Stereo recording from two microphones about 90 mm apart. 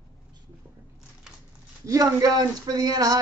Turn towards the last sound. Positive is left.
turn(degrees=-45)  # may be behind; listen again after turning